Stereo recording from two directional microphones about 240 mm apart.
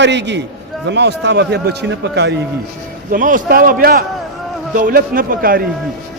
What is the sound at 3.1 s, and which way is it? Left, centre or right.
A man's voice, right.